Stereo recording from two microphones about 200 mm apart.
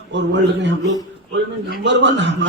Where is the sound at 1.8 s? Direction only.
60° right (ahead or behind).